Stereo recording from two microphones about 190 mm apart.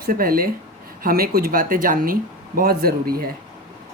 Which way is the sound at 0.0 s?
50° right (ahead or behind).